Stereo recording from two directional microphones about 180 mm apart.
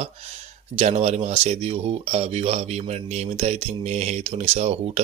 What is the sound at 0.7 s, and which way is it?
Speech, 35° right (ahead or behind).